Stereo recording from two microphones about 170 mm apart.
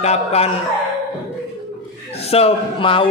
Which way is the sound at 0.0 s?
40° left (ahead or behind).